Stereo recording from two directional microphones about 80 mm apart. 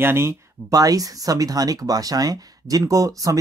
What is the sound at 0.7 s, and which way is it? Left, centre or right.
Speech, right.